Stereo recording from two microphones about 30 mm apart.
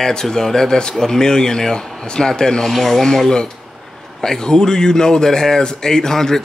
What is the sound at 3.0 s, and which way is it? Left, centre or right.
Speech, centre.